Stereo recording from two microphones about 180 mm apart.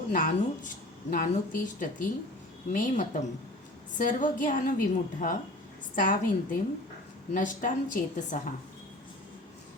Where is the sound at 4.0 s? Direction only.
45° left (ahead or behind).